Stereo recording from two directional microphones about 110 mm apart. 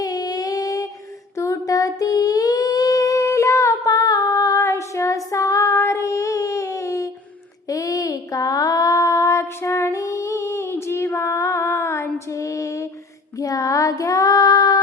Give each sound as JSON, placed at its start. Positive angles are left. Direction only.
{"t": 0.0, "sound": "a sound", "side_deg": 35}
{"t": 1.4, "sound": "singing", "side_deg": 30}
{"t": 7.7, "sound": "child singing", "side_deg": 30}